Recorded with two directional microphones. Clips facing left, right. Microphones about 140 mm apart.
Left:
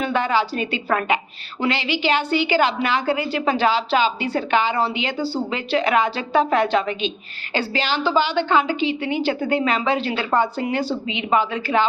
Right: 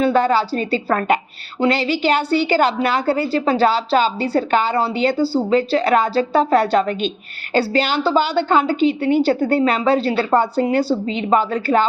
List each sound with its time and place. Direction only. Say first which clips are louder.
0.0 s a woman's voice: right 5 dB; 35° right (ahead or behind)